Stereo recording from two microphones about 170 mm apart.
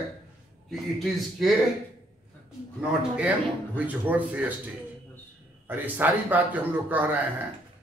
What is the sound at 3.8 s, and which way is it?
Speech, 10° right (ahead or behind).